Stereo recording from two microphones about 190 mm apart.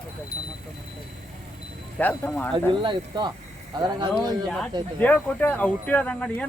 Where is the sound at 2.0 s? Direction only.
10° left (ahead or behind).